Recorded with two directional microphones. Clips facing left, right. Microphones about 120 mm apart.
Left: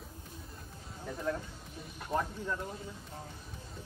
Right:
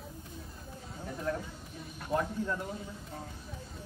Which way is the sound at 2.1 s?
10° right (ahead or behind).